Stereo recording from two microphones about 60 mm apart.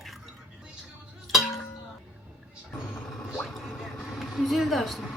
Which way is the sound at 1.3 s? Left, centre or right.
Centre.